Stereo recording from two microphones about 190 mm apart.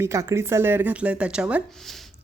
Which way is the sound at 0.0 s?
15° right (ahead or behind).